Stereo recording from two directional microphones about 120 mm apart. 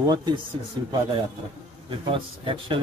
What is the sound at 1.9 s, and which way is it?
Speech, 45° right (ahead or behind).